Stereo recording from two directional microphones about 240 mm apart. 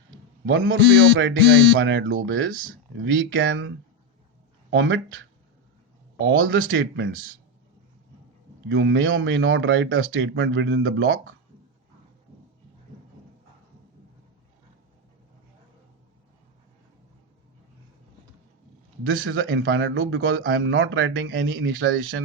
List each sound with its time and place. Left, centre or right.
0.4 s speech: right
4.7 s speech: right
6.1 s speech: right
8.7 s speech: right
19.0 s speech: right